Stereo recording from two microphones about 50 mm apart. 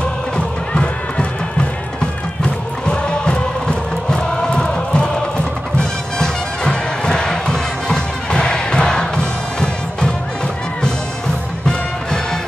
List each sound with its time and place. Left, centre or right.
0.7 s music: centre